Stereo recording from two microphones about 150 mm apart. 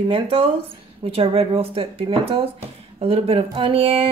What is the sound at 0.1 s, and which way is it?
Speech, 40° right (ahead or behind).